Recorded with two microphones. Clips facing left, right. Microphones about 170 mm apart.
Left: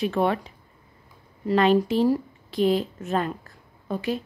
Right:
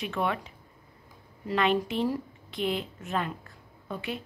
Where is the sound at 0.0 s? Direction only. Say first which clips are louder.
Left 7 dB; 35° left (ahead or behind).